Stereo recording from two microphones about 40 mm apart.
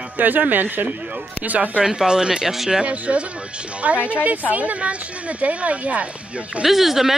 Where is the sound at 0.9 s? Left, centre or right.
Right.